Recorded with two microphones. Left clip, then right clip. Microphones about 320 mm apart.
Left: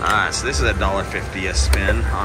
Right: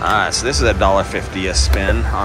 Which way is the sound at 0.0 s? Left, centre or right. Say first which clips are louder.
Right 3 dB; centre.